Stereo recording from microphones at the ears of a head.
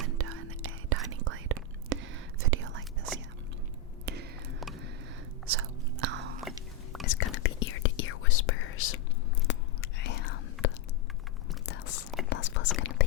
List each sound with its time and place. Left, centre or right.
0.0 s whispering: right
5.5 s chewing: right
7.0 s whispering: left